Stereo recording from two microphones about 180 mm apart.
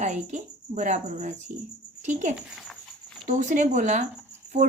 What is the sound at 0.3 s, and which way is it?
Speech, 40° right (ahead or behind).